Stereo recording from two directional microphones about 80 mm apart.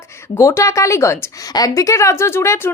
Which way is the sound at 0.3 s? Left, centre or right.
Left.